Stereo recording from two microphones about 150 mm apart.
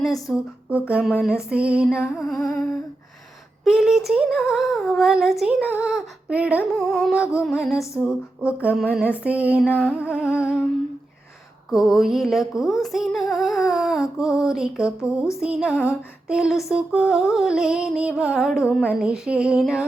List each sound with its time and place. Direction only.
0.0 s humming: centre (ahead or behind)
1.2 s female singing: 5° right (ahead or behind)
2.1 s humming: centre (ahead or behind)
3.6 s humming: centre (ahead or behind)
7.9 s female singing: 10° right (ahead or behind)
10.0 s humming: 10° right (ahead or behind)
11.7 s humming: centre (ahead or behind)
13.7 s a sound: centre (ahead or behind)
14.2 s humming: 5° right (ahead or behind)